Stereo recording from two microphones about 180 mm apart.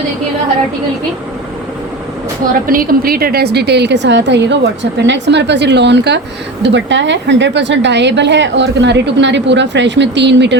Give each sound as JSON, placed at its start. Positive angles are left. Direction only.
{"t": 2.6, "sound": "a woman's voice", "side_deg": -55}
{"t": 6.6, "sound": "a woman's voice", "side_deg": -85}